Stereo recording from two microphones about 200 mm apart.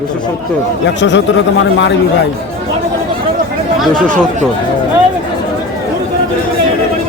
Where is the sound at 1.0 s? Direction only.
65° left (ahead or behind).